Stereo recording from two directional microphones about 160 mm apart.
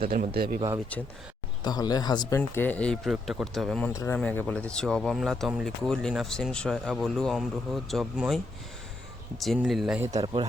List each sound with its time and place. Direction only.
0.0 s speech: 60° right (ahead or behind)
0.9 s speech: 10° left (ahead or behind)
1.6 s speech: 25° left (ahead or behind)
2.6 s speech: 10° left (ahead or behind)
3.9 s speech: 15° left (ahead or behind); by 8.4 s centre (ahead or behind)
9.4 s speech: centre (ahead or behind)